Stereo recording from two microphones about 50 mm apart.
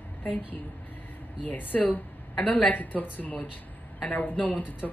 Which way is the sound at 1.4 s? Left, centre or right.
Left.